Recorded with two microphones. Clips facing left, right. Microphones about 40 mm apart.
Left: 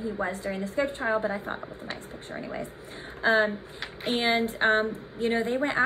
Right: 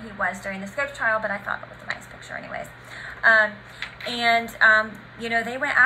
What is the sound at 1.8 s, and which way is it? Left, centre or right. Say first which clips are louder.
A woman's voice: right 4 dB; right.